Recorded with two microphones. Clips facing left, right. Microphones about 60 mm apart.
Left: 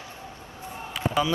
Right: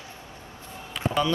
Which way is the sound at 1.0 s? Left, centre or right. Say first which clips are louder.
Left 1 dB; centre.